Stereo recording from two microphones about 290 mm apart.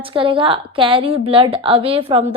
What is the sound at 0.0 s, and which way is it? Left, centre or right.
A woman's voice, centre.